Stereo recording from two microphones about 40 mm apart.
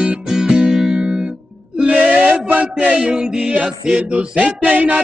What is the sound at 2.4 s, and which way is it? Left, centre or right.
Music, right.